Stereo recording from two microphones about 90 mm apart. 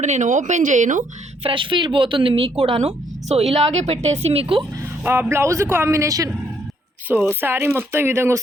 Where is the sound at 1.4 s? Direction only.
65° right (ahead or behind); by 2.8 s 90° right.